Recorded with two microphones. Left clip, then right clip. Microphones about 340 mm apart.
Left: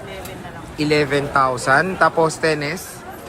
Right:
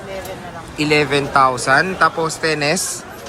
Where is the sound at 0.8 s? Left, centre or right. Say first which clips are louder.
Right 2 dB; centre.